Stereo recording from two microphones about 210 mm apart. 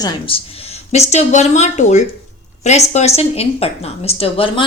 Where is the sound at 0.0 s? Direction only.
25° left (ahead or behind).